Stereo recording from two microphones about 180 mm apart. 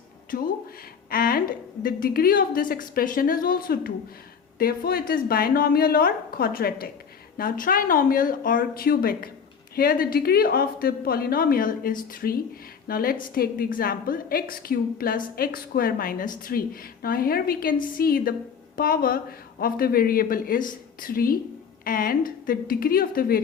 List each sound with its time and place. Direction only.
1.1 s a woman's voice: 55° left (ahead or behind)